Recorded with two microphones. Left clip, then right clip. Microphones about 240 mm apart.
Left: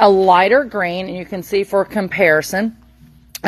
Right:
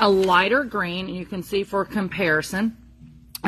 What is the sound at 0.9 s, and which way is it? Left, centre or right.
Speech, left.